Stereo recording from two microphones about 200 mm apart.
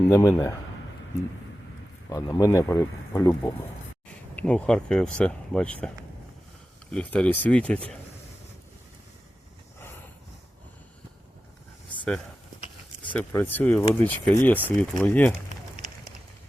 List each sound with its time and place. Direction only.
0.1 s speech: 15° left (ahead or behind)
2.0 s speech: 15° left (ahead or behind)
6.9 s speech: 5° left (ahead or behind)
13.1 s speech: 10° left (ahead or behind)